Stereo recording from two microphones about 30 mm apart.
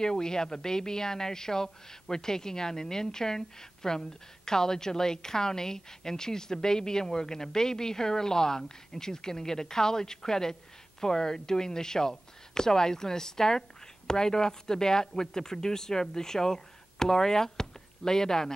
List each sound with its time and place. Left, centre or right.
0.0 s a woman's voice: left